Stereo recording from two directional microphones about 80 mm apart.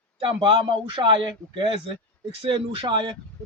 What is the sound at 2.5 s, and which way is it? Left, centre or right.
Speech, right.